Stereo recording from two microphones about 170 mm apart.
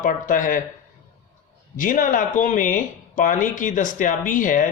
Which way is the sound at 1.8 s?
50° left (ahead or behind).